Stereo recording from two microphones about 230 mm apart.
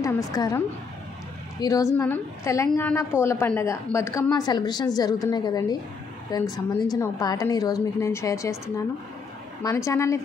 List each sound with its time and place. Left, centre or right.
0.0 s a woman's voice: centre
1.6 s a woman's voice: centre